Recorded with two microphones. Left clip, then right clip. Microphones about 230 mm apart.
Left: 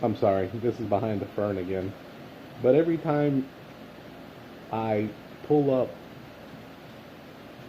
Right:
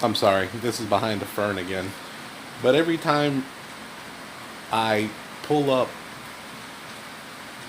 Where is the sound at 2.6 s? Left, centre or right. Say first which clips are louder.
Right 2 dB; centre.